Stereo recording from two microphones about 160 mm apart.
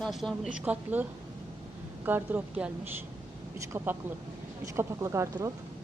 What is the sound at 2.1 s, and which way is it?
Speech, 10° right (ahead or behind).